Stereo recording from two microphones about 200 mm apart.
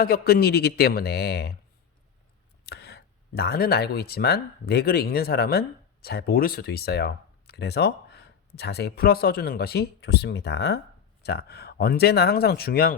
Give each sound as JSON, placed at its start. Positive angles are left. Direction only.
{"t": 0.0, "sound": "speech", "side_deg": 50}
{"t": 2.6, "sound": "speech", "side_deg": 55}